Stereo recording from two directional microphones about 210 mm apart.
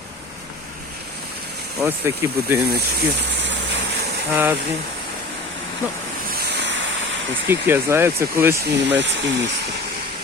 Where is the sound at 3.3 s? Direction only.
55° right (ahead or behind).